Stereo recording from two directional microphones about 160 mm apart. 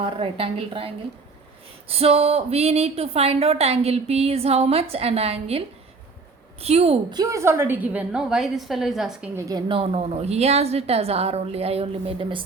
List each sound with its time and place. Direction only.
0.0 s a woman's voice: 35° right (ahead or behind)
7.1 s a woman's voice: 20° right (ahead or behind); by 9.3 s centre (ahead or behind)
9.3 s a woman's voice: 20° right (ahead or behind)